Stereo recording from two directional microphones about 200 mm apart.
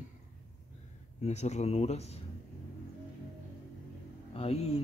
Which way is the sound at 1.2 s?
35° left (ahead or behind).